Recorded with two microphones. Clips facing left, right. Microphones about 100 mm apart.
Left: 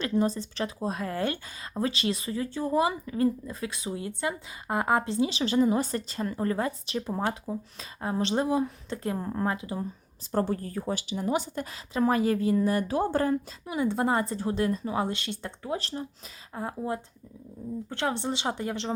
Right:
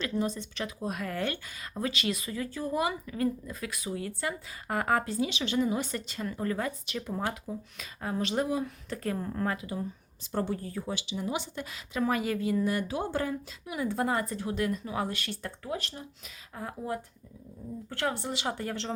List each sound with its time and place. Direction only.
0.0 s speech: 35° left (ahead or behind)
10.3 s speech: 45° left (ahead or behind)
13.7 s speech: 25° left (ahead or behind)